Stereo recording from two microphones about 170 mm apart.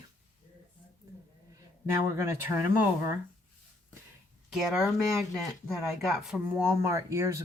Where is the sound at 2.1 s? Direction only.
15° right (ahead or behind).